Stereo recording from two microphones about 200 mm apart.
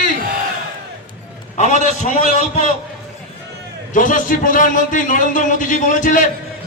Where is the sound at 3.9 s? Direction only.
40° left (ahead or behind).